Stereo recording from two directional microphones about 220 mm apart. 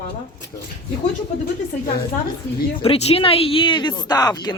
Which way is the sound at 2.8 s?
25° left (ahead or behind).